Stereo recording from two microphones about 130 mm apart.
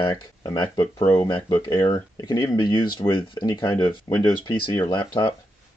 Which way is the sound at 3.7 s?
25° left (ahead or behind).